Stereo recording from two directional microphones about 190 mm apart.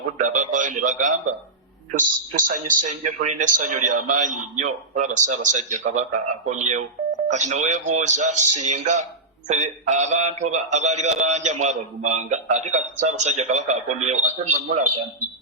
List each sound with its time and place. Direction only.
0.2 s a man's voice: 40° right (ahead or behind)